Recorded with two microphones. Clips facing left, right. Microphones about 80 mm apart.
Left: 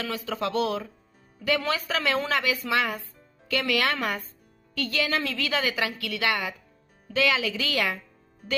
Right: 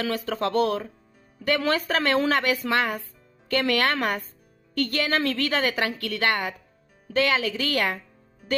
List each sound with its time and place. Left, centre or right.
0.0 s a woman's voice: right